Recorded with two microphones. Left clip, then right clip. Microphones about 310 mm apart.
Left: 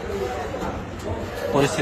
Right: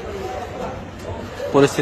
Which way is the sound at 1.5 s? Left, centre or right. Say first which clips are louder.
Right 6 dB; centre.